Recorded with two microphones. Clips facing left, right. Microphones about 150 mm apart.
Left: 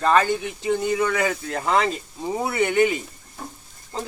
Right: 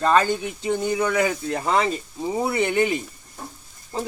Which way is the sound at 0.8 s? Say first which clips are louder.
Right 2 dB; 15° right (ahead or behind).